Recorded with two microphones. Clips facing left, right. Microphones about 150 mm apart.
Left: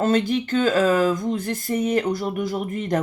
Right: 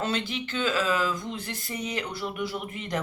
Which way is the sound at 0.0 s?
45° left (ahead or behind).